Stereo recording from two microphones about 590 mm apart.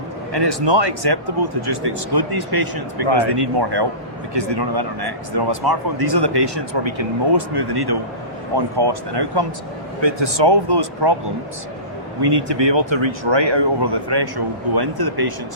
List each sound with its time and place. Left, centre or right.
0.3 s speech: right
12.2 s speech: right